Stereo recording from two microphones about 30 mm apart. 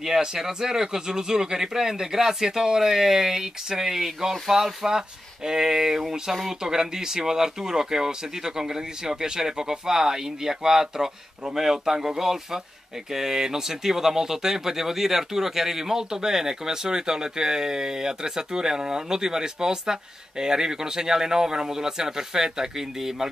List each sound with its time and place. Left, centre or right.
0.2 s speech: right
2.9 s speech: centre